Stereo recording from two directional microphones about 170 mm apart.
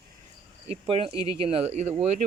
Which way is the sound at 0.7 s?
35° right (ahead or behind).